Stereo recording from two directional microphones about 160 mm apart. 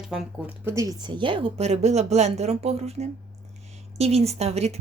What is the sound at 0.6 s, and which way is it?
Speech, 20° right (ahead or behind).